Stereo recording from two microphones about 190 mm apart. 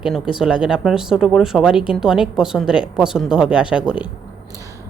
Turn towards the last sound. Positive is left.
turn(degrees=-5)  # may be behind; listen again after turning